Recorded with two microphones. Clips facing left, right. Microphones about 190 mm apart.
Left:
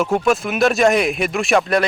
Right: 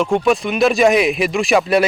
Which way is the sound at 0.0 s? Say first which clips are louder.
Right 2 dB; 5° left (ahead or behind).